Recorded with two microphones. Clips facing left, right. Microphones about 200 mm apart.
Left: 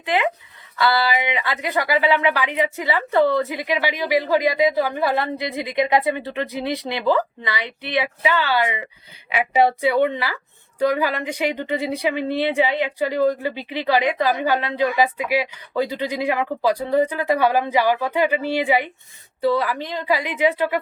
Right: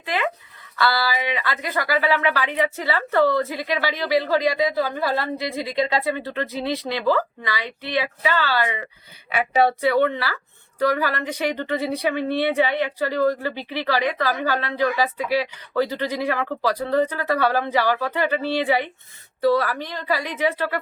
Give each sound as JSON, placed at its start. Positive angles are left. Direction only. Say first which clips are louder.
{"t": 0.0, "sound": "speech", "louder": "left 4 dB", "side_deg": 20}